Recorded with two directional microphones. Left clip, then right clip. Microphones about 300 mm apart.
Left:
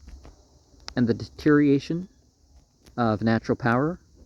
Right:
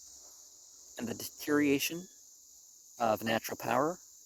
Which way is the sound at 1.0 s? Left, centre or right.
Centre.